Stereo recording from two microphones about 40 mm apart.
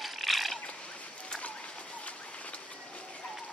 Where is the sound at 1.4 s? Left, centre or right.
Left.